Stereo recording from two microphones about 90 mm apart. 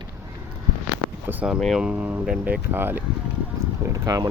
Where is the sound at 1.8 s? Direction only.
15° right (ahead or behind).